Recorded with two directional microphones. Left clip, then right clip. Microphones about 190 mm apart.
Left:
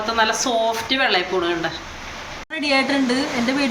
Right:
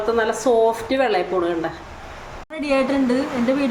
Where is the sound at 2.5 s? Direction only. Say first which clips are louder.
Left 1 dB; 20° right (ahead or behind).